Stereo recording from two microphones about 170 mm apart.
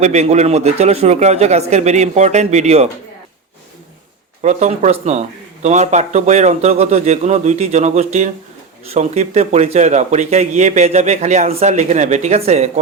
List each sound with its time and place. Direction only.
0.0 s speech: 40° right (ahead or behind)
4.4 s speech: 45° right (ahead or behind)